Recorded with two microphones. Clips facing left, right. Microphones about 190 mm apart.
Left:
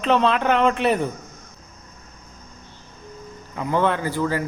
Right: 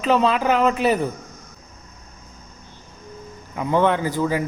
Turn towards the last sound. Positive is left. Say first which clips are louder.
# right 2 dB
turn(degrees=-15)  # may be behind; listen again after turning